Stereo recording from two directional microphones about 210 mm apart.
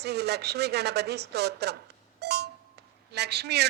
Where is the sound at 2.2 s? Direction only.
50° right (ahead or behind).